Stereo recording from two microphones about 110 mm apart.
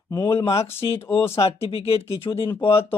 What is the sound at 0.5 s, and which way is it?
Speech, 25° left (ahead or behind).